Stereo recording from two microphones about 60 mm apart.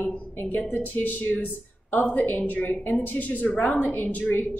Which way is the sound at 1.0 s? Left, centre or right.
Left.